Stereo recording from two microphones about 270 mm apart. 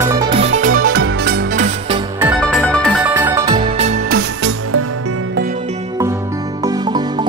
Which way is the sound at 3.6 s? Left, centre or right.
Right.